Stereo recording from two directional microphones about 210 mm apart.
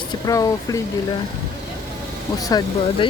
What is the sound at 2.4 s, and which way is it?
Speech, 20° left (ahead or behind).